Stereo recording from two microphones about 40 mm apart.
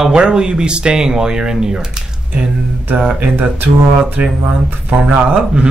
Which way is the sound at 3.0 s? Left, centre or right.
Right.